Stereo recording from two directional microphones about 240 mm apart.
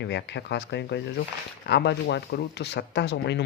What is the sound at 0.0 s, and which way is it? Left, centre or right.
Speech, left.